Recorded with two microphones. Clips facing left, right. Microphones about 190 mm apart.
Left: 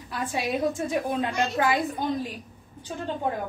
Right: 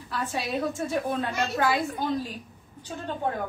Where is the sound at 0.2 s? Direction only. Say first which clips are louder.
Left 3 dB; 15° left (ahead or behind).